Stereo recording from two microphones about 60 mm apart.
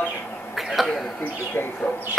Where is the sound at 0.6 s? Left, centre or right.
Centre.